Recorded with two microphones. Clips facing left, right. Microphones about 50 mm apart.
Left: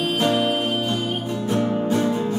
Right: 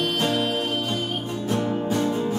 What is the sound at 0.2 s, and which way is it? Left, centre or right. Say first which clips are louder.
Music: left 6 dB; centre.